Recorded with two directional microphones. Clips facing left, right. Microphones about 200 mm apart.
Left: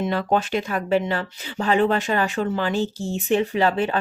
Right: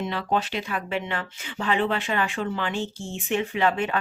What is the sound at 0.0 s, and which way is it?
Speech, 45° left (ahead or behind).